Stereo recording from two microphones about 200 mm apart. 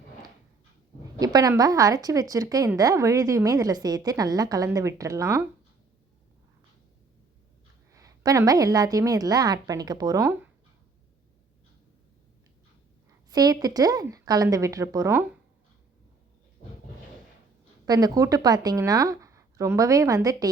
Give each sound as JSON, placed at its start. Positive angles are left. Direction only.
{"t": 1.2, "sound": "a woman's voice", "side_deg": -20}
{"t": 7.9, "sound": "a woman's voice", "side_deg": -15}
{"t": 13.3, "sound": "a woman's voice", "side_deg": -20}
{"t": 17.8, "sound": "a woman's voice", "side_deg": -20}